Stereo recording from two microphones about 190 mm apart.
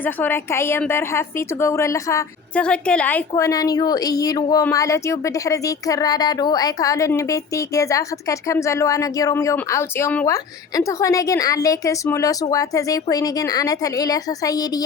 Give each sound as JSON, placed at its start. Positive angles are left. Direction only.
{"t": 0.0, "sound": "speech", "side_deg": 10}
{"t": 2.6, "sound": "a woman's voice", "side_deg": 5}